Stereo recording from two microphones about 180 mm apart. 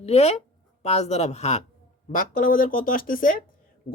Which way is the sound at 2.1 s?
50° left (ahead or behind).